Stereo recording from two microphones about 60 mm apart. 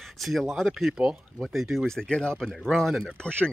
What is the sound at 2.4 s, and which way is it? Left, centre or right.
Speech, centre.